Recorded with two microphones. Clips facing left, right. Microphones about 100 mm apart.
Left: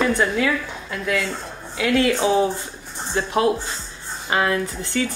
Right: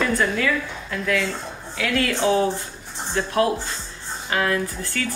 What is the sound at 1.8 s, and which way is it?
Speech, 20° left (ahead or behind).